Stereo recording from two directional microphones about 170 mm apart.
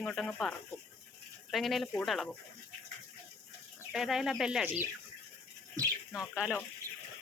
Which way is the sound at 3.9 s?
Centre (ahead or behind).